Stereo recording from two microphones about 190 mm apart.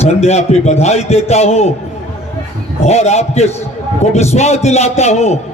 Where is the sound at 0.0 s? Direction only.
35° left (ahead or behind).